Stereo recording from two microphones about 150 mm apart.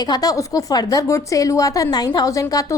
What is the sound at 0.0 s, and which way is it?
A woman's voice, 25° left (ahead or behind).